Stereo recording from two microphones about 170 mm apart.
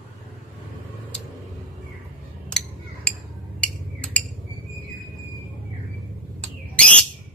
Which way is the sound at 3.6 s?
10° left (ahead or behind).